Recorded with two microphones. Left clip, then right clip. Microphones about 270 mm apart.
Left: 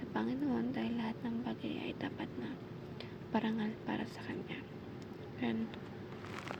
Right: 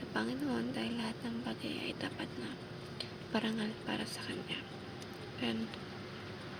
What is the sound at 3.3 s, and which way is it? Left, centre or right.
Speech, centre.